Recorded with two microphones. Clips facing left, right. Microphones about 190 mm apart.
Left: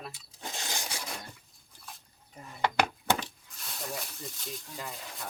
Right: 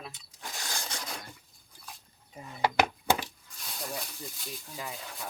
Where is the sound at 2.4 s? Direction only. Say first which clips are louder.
Right 2 dB; 10° right (ahead or behind).